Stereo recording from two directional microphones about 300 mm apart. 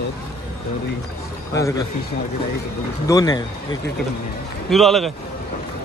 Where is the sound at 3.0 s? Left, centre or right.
Centre.